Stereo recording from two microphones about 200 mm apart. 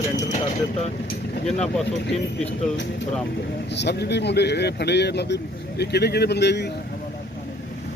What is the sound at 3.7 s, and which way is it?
Speech, 60° left (ahead or behind).